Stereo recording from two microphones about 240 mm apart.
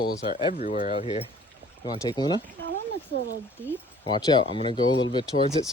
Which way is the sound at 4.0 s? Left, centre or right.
Centre.